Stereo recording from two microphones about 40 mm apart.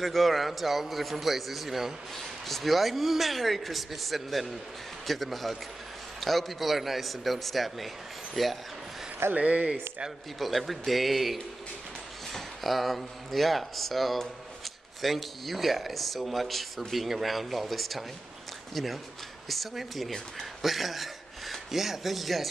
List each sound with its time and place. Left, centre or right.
0.0 s speech: centre
2.1 s speech: centre
9.3 s speech: right
10.4 s speech: centre
19.5 s speech: centre